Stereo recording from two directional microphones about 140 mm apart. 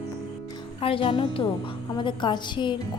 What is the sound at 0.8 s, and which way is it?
A woman's voice, 40° left (ahead or behind).